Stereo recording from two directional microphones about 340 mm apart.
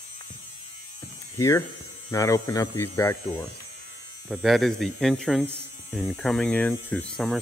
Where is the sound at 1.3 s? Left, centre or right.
Centre.